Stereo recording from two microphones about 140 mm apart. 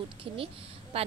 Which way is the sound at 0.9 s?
45° right (ahead or behind).